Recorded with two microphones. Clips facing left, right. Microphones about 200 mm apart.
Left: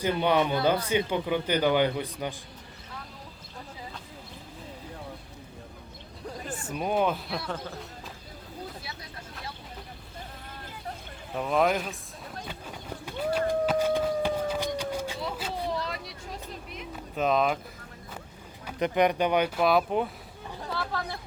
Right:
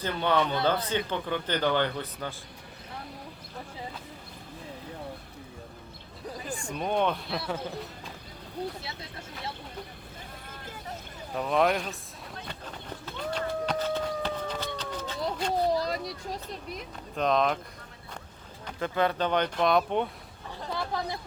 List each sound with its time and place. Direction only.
0.0 s speech: 15° left (ahead or behind)
6.4 s speech: 5° left (ahead or behind)
11.3 s speech: centre (ahead or behind)
12.5 s run: 10° left (ahead or behind)
14.8 s a sound: 10° left (ahead or behind)
15.7 s a sound: 40° right (ahead or behind)
16.9 s speech: 5° left (ahead or behind)
18.6 s speech: 15° left (ahead or behind)
20.7 s speech: 15° right (ahead or behind)